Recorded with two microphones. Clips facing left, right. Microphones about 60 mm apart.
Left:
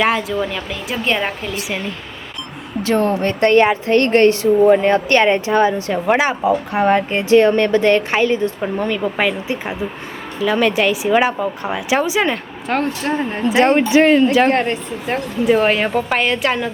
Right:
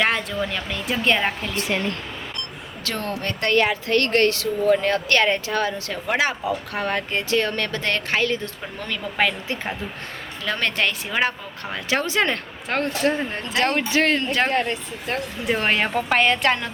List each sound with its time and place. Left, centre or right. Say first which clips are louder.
0.0 s a woman's voice: left 5 dB; centre
2.8 s a woman's voice: left 11 dB; left
9.1 s a woman's voice: left 4 dB; centre
13.4 s a woman's voice: left 11 dB; left
14.5 s speech: left 5 dB; left
15.4 s a woman's voice: left 7 dB; centre